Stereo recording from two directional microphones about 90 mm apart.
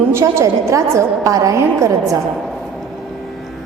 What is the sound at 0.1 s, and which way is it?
A woman's voice, 30° right (ahead or behind).